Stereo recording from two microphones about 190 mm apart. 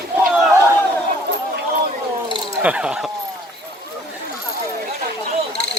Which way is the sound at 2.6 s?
5° right (ahead or behind).